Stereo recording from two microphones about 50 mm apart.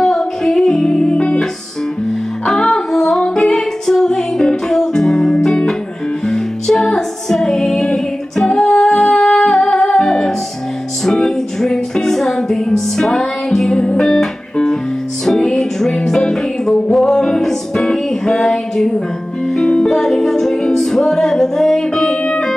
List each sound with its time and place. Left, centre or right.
0.0 s music: centre
2.4 s music: centre